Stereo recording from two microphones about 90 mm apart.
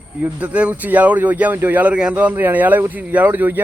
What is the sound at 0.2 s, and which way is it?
Speech, 15° right (ahead or behind).